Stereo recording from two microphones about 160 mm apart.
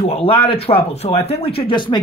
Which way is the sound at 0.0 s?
40° left (ahead or behind).